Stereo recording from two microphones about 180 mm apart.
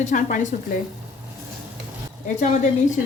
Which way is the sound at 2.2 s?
40° left (ahead or behind).